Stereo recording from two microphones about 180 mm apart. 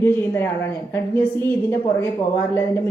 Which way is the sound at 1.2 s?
10° left (ahead or behind).